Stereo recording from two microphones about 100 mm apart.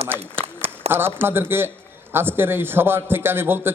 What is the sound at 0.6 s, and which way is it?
A man's voice, 20° right (ahead or behind).